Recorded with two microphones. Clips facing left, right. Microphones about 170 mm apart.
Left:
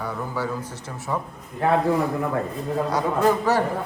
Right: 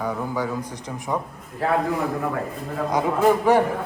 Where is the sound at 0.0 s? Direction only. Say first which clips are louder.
Right 2 dB; 10° right (ahead or behind).